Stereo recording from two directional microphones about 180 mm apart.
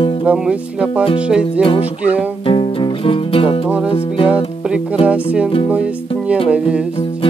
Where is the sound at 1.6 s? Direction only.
30° left (ahead or behind).